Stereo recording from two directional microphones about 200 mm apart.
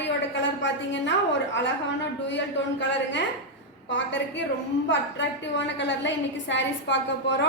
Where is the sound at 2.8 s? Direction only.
65° left (ahead or behind).